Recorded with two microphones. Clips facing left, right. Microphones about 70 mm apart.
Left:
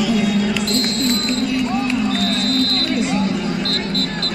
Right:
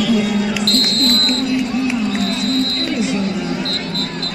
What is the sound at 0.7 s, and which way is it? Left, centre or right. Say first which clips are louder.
Speech: right 1 dB; right.